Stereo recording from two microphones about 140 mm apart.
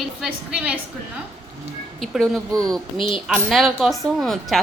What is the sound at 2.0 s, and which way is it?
A woman's voice, centre (ahead or behind).